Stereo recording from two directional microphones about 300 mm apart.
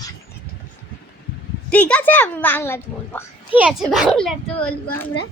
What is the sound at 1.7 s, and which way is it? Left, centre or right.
A child's voice, centre.